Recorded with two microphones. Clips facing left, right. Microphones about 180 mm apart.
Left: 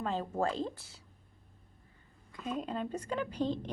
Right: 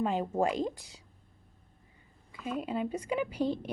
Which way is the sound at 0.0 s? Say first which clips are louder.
Right 4 dB; 15° right (ahead or behind).